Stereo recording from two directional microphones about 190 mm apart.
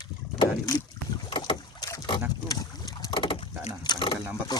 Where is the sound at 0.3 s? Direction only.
20° left (ahead or behind).